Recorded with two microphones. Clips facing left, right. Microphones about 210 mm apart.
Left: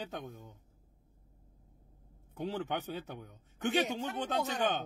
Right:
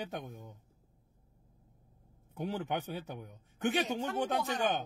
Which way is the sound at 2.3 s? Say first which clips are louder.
Even; 15° right (ahead or behind).